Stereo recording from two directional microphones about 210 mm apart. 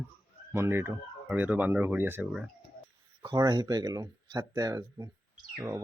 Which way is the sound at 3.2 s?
20° right (ahead or behind).